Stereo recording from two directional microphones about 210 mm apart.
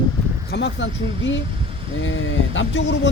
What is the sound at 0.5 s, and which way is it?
Speech, 60° left (ahead or behind).